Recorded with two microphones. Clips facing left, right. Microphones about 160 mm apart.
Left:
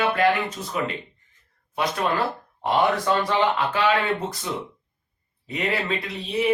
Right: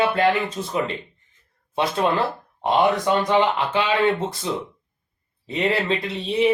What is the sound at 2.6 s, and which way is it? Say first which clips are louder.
Speech: right 2 dB; 20° right (ahead or behind).